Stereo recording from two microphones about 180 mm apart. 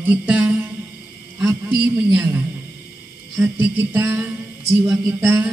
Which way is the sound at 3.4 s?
10° right (ahead or behind).